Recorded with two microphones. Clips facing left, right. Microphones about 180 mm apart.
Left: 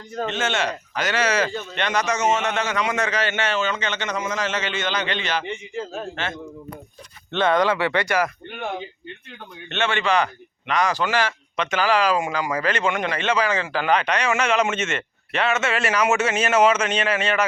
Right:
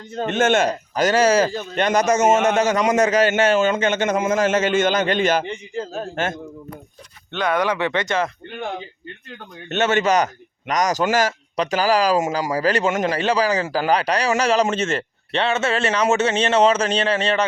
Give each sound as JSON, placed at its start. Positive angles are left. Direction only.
{"t": 0.3, "sound": "speech", "side_deg": -50}
{"t": 7.5, "sound": "speech", "side_deg": -15}
{"t": 9.6, "sound": "speech", "side_deg": -40}